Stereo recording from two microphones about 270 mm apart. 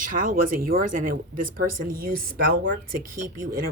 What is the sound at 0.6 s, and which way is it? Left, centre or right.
Speech, right.